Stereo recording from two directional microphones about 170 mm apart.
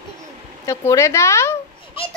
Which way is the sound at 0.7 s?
15° left (ahead or behind).